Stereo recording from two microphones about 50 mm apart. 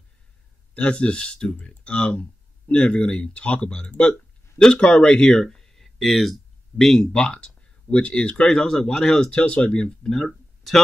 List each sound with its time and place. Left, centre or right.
0.7 s speech: left